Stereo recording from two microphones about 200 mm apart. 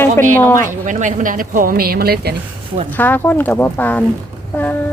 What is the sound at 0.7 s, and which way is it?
Speech, 40° right (ahead or behind).